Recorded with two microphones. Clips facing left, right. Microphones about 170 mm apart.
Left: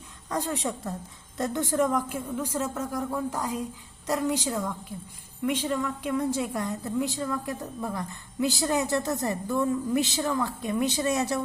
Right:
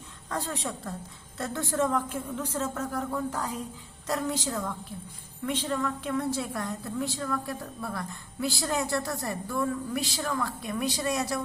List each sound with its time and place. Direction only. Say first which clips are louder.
0.3 s a woman's voice: left 4 dB; 15° left (ahead or behind)